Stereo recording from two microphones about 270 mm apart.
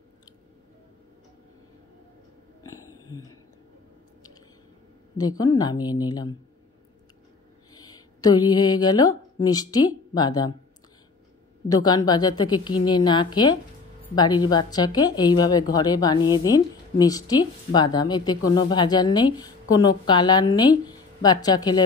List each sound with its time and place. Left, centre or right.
3.1 s speech: centre
5.1 s a woman's voice: centre
7.7 s speech: centre
11.7 s a woman's voice: centre